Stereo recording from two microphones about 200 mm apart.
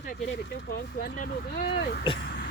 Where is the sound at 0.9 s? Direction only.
45° left (ahead or behind).